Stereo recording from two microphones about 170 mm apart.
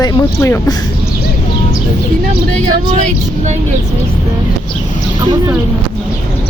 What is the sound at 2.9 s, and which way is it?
Speech, 45° right (ahead or behind).